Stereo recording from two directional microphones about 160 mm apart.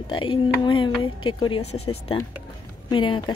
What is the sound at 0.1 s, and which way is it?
Speech, 30° left (ahead or behind).